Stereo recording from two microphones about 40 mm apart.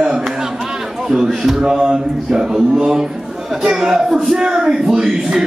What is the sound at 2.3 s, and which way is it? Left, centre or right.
A man's voice, centre.